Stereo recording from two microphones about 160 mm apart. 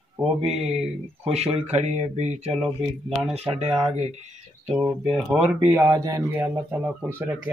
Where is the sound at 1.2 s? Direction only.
40° right (ahead or behind).